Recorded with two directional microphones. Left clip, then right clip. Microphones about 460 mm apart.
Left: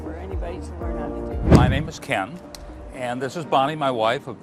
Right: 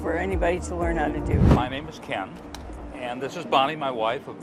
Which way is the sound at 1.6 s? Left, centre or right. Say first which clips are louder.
Left 5 dB; left.